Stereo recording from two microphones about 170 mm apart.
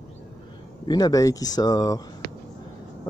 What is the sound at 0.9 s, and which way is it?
Speech, 20° left (ahead or behind).